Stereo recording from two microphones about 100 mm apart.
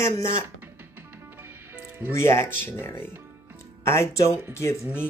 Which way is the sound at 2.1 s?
25° left (ahead or behind).